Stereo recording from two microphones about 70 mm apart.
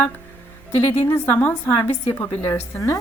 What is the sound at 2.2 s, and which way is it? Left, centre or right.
Speech, left.